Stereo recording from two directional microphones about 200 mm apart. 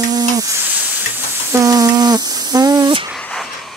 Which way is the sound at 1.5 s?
15° right (ahead or behind).